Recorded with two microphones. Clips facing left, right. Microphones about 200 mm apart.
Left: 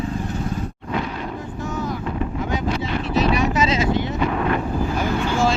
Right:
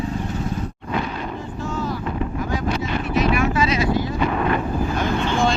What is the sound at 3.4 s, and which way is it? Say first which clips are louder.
Vehicle: even; 20° left (ahead or behind).